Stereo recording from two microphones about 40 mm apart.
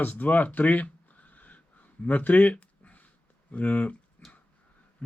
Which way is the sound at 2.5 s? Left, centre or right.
Left.